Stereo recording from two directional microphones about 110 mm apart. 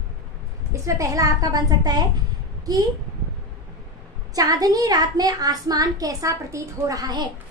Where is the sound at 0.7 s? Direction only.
30° right (ahead or behind).